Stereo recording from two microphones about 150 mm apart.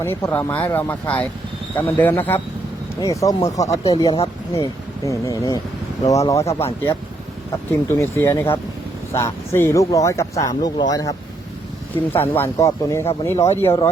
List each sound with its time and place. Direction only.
0.0 s speech: 15° left (ahead or behind); by 4.2 s 30° left (ahead or behind)
4.5 s speech: 20° left (ahead or behind)
7.9 s speech: 15° left (ahead or behind)
12.1 s speech: 15° left (ahead or behind)